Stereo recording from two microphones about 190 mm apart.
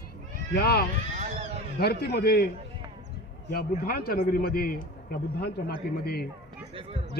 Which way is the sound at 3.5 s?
50° left (ahead or behind).